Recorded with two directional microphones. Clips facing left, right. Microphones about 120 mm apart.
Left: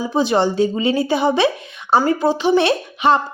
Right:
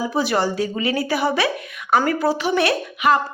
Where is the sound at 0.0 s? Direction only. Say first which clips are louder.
Left 3 dB; 20° left (ahead or behind).